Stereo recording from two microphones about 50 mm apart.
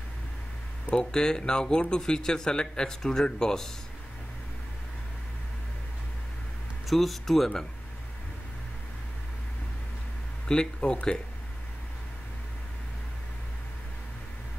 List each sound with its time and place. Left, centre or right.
0.9 s speech: centre
6.9 s speech: centre
10.5 s speech: centre